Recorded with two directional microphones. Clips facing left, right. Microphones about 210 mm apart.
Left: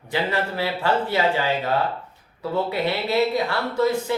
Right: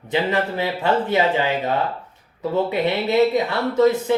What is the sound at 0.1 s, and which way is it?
Speech, 20° right (ahead or behind).